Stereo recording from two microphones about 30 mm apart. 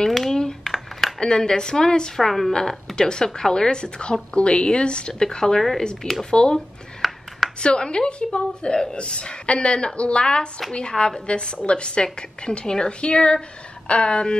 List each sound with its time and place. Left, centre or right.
0.1 s a sound: centre
1.2 s a woman's voice: left
2.2 s a woman's voice: centre
3.0 s a woman's voice: left
5.6 s a woman's voice: centre
6.3 s a woman's voice: left
7.0 s a sound: centre
7.6 s a woman's voice: left